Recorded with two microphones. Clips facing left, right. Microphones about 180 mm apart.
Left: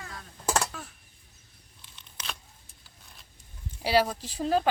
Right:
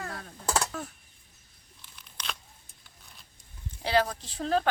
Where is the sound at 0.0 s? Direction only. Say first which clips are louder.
Right 5 dB; 60° right (ahead or behind).